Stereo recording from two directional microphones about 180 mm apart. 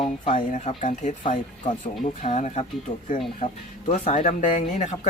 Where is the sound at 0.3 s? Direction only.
45° left (ahead or behind).